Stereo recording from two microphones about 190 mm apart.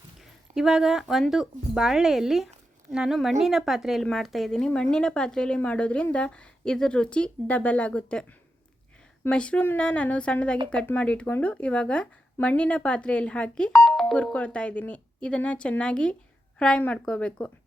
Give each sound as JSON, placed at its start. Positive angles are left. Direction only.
{"t": 0.5, "sound": "a woman's voice", "side_deg": 0}